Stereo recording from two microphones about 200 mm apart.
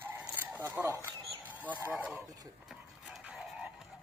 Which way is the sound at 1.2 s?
10° right (ahead or behind).